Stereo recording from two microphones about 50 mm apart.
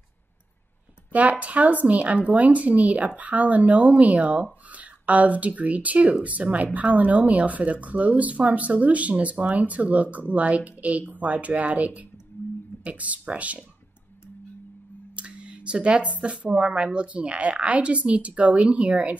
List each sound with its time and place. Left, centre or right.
1.1 s speech: right
15.1 s speech: right